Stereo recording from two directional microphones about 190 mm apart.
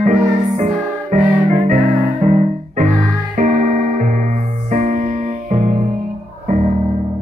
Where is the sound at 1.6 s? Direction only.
40° right (ahead or behind).